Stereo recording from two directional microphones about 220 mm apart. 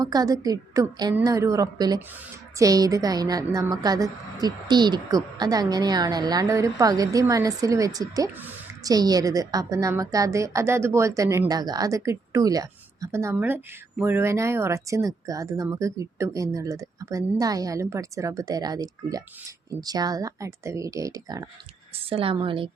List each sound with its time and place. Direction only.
0.0 s a woman's voice: 15° right (ahead or behind)